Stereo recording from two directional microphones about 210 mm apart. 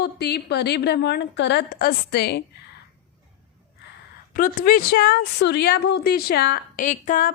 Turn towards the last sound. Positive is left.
turn(degrees=35)  # may be behind; listen again after turning